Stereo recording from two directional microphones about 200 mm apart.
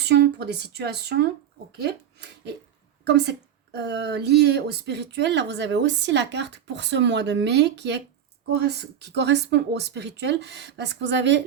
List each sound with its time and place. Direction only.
0.0 s a woman's voice: 55° right (ahead or behind)